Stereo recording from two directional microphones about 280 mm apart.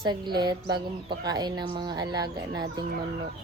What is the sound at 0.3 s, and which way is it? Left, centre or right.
A woman's voice, centre.